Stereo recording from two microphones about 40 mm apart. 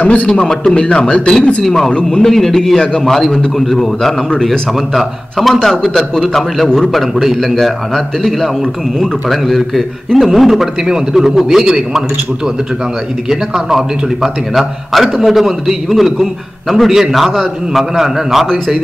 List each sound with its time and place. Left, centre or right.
0.0 s a man's voice: left
0.3 s a man's voice: centre
1.6 s a man's voice: centre
13.3 s a man's voice: centre